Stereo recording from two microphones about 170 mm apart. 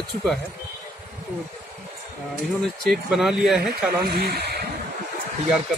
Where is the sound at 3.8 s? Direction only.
65° right (ahead or behind).